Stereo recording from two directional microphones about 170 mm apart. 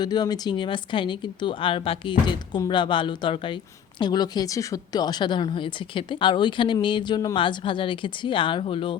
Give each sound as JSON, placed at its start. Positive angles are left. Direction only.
{"t": 0.0, "sound": "a woman's voice", "side_deg": 25}